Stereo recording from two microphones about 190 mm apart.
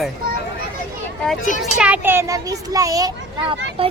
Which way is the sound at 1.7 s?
5° right (ahead or behind).